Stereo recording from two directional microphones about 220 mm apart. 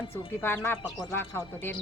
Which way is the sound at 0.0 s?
25° left (ahead or behind).